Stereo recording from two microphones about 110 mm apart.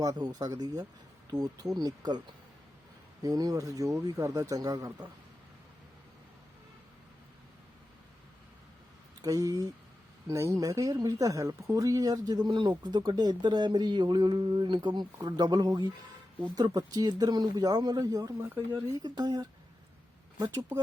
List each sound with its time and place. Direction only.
0.0 s speech: 35° right (ahead or behind)
3.2 s speech: 35° right (ahead or behind)
9.2 s speech: 30° right (ahead or behind)
12.5 s speech: 50° right (ahead or behind); by 18.3 s 30° right (ahead or behind)
18.3 s speech: 20° right (ahead or behind)
19.0 s speech: 40° right (ahead or behind)